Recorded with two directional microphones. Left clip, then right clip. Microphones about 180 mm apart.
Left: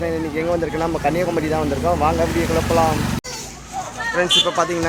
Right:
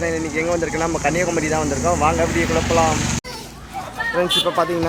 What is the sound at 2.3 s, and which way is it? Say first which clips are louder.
Speech: even; 60° left (ahead or behind).